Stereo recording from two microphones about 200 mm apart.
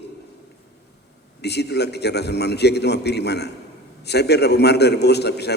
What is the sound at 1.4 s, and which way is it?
A man's voice, 55° left (ahead or behind).